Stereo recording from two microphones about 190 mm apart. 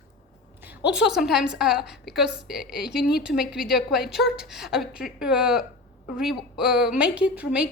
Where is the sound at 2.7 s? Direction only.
60° left (ahead or behind).